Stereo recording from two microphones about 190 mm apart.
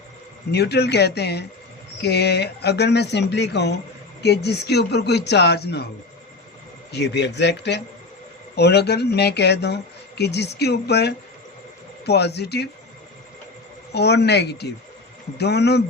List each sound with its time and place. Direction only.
0.5 s speech: 60° left (ahead or behind)
6.9 s speech: 65° left (ahead or behind)
13.9 s speech: 60° left (ahead or behind)